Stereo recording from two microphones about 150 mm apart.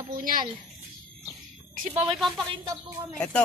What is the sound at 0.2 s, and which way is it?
Speech, 70° right (ahead or behind).